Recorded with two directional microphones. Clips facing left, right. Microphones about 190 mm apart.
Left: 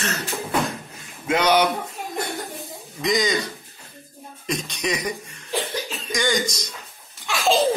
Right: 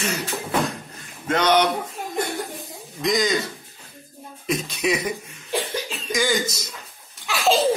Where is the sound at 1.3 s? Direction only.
10° left (ahead or behind).